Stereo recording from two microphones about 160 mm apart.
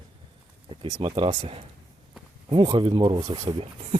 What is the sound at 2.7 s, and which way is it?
Speech, 30° right (ahead or behind).